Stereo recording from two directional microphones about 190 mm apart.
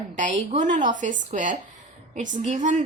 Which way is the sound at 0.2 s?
40° right (ahead or behind).